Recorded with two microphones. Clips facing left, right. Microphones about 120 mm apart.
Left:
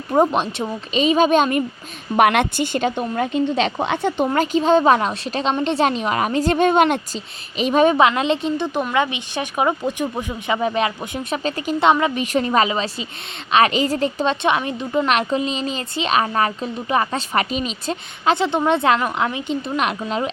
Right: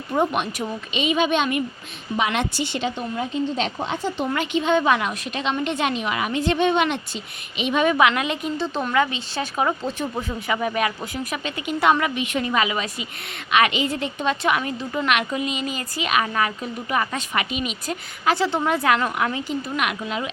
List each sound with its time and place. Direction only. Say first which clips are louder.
0.1 s a woman's voice: left 5 dB; 35° left (ahead or behind)
2.1 s a woman's voice: left 7 dB; 60° left (ahead or behind)
4.3 s a woman's voice: left 4 dB; 35° left (ahead or behind)
11.4 s a woman's voice: left 5 dB; 35° left (ahead or behind)
11.8 s a woman's voice: left 3 dB; 25° left (ahead or behind)
12.1 s a woman's voice: left 5 dB; 35° left (ahead or behind)